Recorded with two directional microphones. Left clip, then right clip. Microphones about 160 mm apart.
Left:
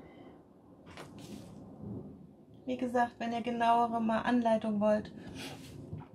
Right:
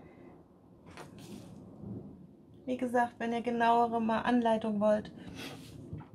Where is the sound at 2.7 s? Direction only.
20° right (ahead or behind).